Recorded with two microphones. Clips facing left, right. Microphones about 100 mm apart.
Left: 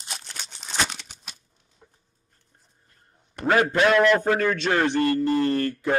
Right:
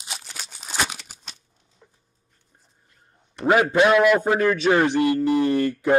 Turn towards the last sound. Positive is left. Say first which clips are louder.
# right 4 dB
turn(degrees=-20)  # may be behind; listen again after turning